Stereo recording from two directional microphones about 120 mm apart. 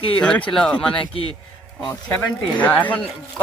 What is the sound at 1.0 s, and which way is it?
Speech, 50° left (ahead or behind).